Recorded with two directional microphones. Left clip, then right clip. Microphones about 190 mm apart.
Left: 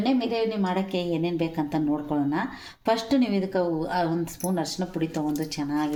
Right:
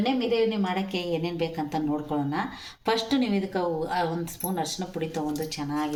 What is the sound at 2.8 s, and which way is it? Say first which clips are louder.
Speech: left 2 dB; 45° left (ahead or behind).